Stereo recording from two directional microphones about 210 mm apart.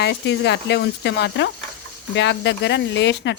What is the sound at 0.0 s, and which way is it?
Speech, 55° left (ahead or behind).